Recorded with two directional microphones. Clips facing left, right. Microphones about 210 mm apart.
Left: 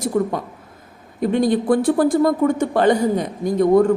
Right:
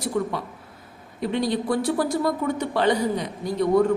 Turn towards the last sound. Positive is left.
turn(degrees=45)  # may be behind; listen again after turning